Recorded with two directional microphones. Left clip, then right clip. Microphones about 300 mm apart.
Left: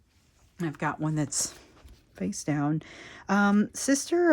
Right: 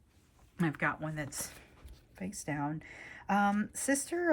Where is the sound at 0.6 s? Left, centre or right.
Centre.